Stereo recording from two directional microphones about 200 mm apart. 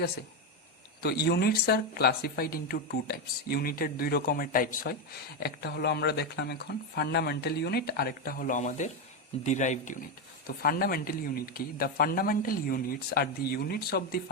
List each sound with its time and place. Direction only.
1.0 s speech: 55° left (ahead or behind)